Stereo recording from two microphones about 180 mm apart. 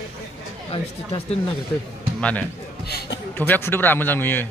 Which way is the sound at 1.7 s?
10° left (ahead or behind).